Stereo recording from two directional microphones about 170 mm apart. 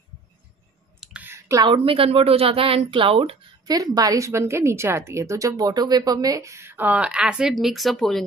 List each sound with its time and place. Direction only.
1.0 s clicking: 10° right (ahead or behind)
1.7 s speech: 35° right (ahead or behind)
3.7 s a woman's voice: 20° right (ahead or behind); by 8.3 s centre (ahead or behind)